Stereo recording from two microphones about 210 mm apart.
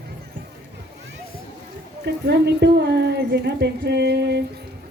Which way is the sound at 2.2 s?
55° right (ahead or behind).